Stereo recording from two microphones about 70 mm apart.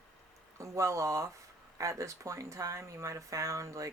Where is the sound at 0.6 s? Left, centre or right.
Right.